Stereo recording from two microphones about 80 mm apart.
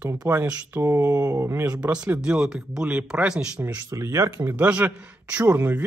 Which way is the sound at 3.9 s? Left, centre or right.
Right.